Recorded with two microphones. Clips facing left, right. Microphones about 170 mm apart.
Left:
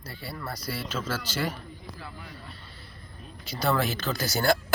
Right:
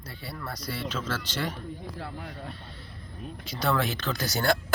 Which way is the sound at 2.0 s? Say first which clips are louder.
Right 5 dB; 55° right (ahead or behind).